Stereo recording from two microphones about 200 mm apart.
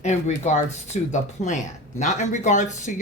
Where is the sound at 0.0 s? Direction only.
35° left (ahead or behind).